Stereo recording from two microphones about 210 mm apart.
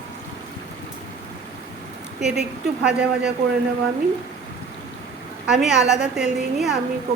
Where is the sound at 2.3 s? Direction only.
5° right (ahead or behind).